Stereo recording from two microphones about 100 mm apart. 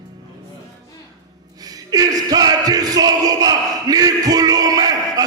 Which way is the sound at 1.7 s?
40° right (ahead or behind).